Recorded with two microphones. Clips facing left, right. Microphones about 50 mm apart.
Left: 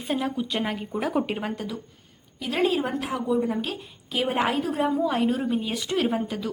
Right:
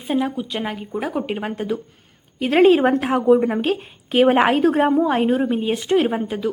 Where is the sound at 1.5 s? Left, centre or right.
Right.